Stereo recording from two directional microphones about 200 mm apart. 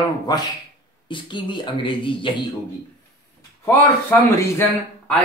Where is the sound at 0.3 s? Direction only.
20° left (ahead or behind).